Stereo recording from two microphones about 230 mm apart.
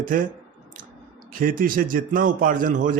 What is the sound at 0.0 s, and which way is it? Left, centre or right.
Speech, right.